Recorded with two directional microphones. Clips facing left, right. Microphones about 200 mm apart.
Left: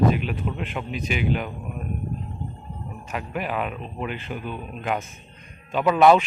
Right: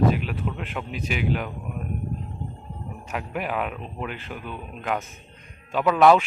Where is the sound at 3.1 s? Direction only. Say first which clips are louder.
Even; 5° right (ahead or behind).